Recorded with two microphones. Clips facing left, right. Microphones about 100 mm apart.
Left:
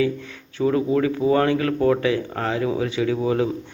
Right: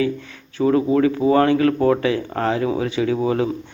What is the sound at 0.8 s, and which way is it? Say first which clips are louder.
Speech: right 3 dB; 15° right (ahead or behind).